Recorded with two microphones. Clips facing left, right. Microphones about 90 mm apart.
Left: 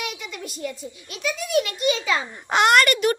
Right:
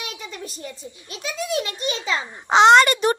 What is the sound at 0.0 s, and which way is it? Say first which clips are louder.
A child's voice: left 2 dB; 35° right (ahead or behind).